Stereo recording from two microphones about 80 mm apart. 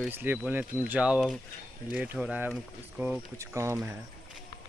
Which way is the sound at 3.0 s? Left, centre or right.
Right.